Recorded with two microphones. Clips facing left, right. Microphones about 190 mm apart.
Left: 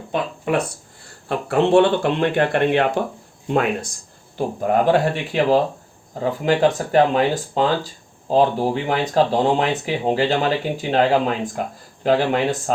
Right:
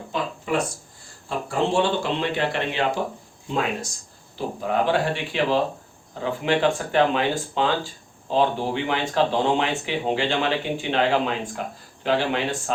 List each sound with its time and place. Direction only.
0.1 s a sound: 65° left (ahead or behind)
1.3 s speech: 65° left (ahead or behind)
4.4 s speech: 50° left (ahead or behind)